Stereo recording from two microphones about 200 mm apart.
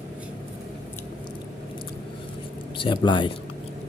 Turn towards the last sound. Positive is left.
turn(degrees=25)  # may be behind; listen again after turning